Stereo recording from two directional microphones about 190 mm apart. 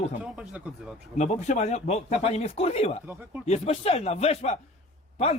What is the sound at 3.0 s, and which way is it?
Speech, 10° right (ahead or behind).